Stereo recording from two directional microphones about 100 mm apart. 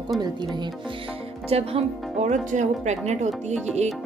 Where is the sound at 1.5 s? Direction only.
80° right.